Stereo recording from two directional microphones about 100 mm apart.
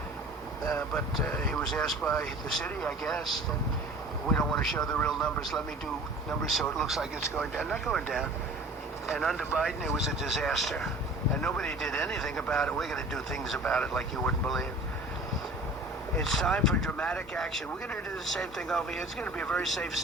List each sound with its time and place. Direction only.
1.2 s speech: 5° left (ahead or behind)
16.1 s speech: centre (ahead or behind)